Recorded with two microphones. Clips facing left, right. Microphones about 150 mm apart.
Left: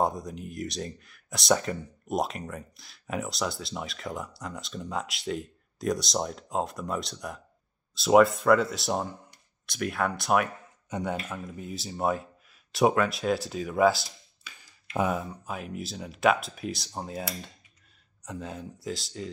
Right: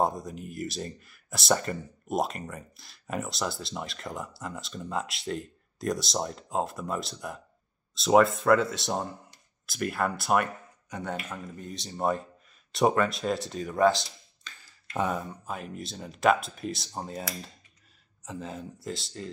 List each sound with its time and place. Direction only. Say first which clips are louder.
0.0 s speech: even; centre (ahead or behind)
10.9 s speech: left 4 dB; 15° left (ahead or behind)
11.2 s speech: left 2 dB; 5° left (ahead or behind)